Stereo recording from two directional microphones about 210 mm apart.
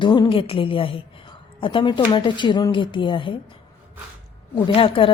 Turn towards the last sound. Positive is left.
turn(degrees=25)  # may be behind; listen again after turning